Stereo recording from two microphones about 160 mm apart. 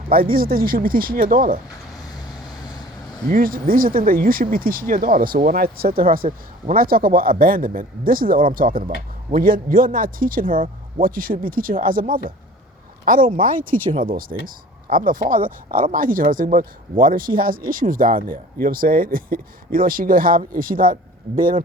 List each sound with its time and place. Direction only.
0.1 s speech: 65° right (ahead or behind)
3.2 s speech: 60° right (ahead or behind)
13.3 s speech: 60° right (ahead or behind)